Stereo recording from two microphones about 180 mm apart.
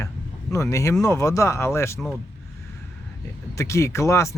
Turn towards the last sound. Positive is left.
turn(degrees=15)  # may be behind; listen again after turning